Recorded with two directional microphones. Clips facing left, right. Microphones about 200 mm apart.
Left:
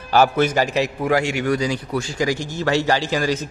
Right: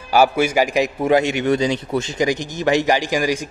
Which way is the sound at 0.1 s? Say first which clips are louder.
Right 1 dB; 10° right (ahead or behind).